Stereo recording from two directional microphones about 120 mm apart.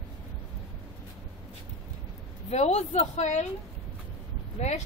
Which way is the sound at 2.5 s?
65° left (ahead or behind).